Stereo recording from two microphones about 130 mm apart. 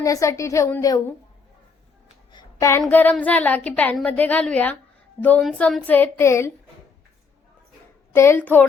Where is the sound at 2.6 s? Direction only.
25° left (ahead or behind).